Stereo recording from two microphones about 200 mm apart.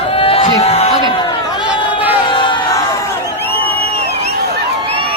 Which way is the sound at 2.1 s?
25° left (ahead or behind).